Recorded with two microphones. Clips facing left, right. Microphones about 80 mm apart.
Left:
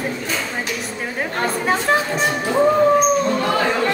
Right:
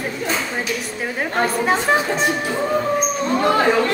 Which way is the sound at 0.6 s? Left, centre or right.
Centre.